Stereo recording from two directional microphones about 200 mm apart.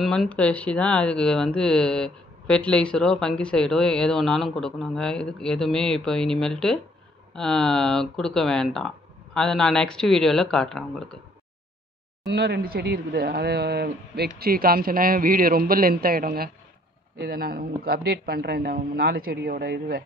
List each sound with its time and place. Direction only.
0.0 s speech: centre (ahead or behind)
12.3 s speech: 55° right (ahead or behind)